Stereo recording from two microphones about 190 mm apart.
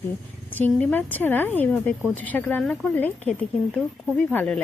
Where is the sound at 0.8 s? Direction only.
10° left (ahead or behind).